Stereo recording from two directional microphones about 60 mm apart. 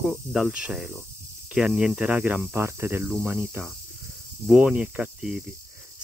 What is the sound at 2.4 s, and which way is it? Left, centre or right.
Cricket, right.